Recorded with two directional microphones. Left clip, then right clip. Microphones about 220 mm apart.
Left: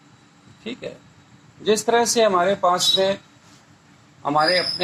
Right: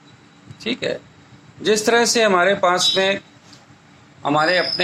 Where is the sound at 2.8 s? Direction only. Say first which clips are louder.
Right 1 dB; 15° right (ahead or behind).